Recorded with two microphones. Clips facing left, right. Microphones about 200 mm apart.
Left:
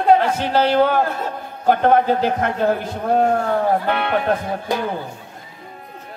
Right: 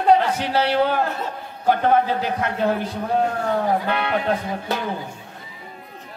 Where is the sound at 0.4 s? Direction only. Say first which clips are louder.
Left 4 dB; 50° left (ahead or behind).